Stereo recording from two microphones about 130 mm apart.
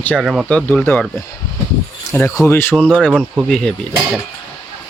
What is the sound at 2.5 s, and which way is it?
Speech, 15° left (ahead or behind).